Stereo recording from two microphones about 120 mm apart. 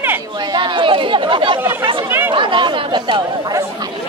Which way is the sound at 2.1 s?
20° right (ahead or behind).